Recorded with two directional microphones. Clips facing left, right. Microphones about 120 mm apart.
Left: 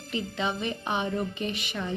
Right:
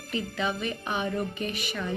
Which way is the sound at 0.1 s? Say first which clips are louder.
Even; 20° left (ahead or behind).